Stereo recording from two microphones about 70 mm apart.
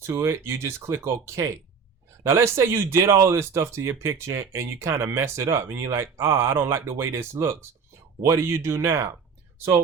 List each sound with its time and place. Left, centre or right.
0.0 s speech: right